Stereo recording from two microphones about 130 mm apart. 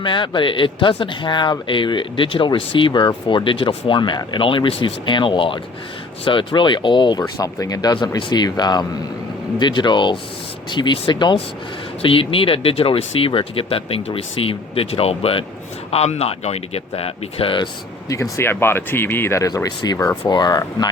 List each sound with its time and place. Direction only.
0.0 s speech: 40° left (ahead or behind)
7.2 s speech: 25° left (ahead or behind); by 17.7 s 45° left (ahead or behind)
18.1 s speech: 20° left (ahead or behind)